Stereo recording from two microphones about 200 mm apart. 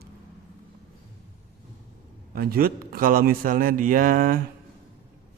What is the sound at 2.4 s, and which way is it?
Speech, 50° right (ahead or behind).